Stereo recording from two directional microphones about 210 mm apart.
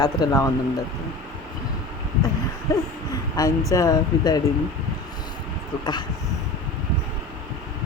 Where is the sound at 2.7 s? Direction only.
15° left (ahead or behind).